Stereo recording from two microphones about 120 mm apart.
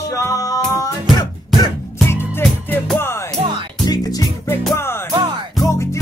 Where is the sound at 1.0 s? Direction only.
Centre (ahead or behind).